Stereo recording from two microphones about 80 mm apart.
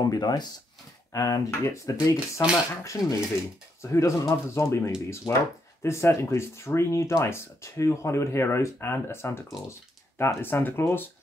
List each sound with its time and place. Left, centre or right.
0.0 s speech: left
1.1 s speech: left